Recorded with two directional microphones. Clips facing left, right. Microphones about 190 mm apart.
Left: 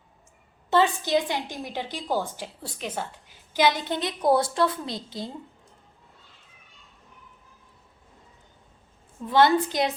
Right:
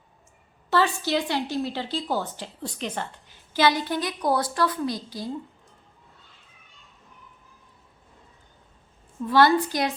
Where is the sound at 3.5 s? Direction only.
20° left (ahead or behind).